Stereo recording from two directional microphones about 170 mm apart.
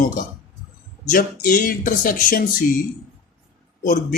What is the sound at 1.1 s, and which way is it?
A man's voice, 50° left (ahead or behind).